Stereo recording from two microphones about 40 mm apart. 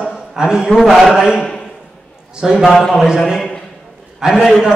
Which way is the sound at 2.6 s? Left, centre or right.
Centre.